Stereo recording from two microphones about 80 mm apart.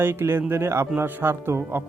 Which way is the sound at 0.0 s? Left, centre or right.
Right.